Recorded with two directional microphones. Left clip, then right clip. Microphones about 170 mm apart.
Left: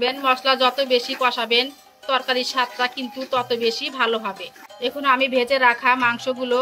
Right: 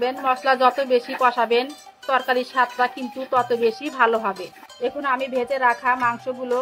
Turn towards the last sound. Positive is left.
turn(degrees=-35)  # may be behind; listen again after turning